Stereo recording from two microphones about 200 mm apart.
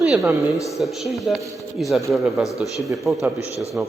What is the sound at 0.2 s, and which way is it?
Speech, 15° right (ahead or behind).